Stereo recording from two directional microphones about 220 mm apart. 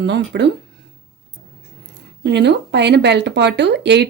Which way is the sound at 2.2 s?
50° right (ahead or behind).